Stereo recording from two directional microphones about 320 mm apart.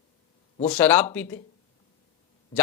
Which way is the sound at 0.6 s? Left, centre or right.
Centre.